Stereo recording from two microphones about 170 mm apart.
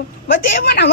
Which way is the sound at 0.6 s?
80° left.